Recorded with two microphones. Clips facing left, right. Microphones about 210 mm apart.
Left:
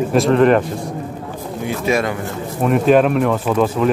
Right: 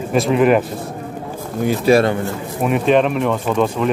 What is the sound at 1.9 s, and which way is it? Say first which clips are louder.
Speech: right 5 dB; 30° right (ahead or behind).